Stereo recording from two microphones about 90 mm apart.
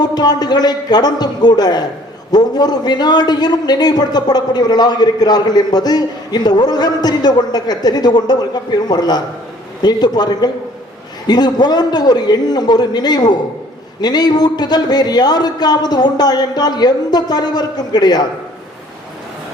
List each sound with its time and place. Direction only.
0.0 s a man's voice: 50° left (ahead or behind)